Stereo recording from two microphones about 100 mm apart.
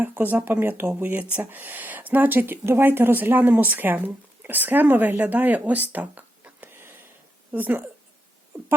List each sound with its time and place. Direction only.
0.0 s speech: 20° right (ahead or behind)